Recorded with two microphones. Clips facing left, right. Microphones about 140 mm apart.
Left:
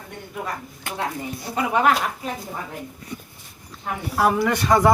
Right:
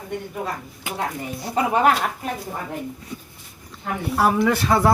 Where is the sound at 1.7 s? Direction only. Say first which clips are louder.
Even; 45° right (ahead or behind).